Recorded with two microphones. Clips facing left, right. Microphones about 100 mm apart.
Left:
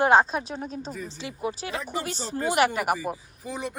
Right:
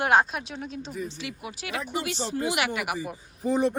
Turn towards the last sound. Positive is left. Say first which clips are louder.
# right 9 dB
turn(degrees=-40)  # may be behind; listen again after turning